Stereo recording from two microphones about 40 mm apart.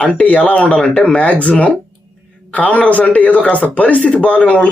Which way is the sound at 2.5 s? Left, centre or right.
Left.